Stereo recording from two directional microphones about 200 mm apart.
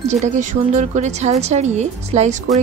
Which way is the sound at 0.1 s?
35° right (ahead or behind).